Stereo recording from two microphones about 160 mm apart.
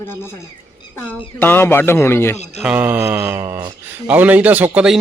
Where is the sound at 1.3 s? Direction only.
15° left (ahead or behind).